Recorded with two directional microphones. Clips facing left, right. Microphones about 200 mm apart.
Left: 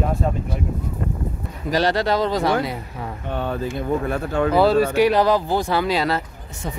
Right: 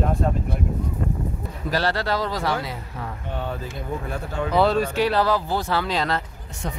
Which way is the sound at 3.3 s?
65° left (ahead or behind).